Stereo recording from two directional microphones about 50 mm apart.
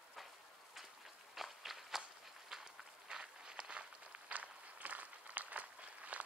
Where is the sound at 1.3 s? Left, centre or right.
Centre.